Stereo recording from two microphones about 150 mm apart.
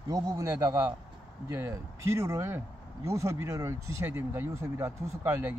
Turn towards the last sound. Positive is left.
turn(degrees=-15)  # may be behind; listen again after turning